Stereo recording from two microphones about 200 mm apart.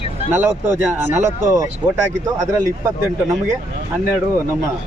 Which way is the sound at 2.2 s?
15° right (ahead or behind).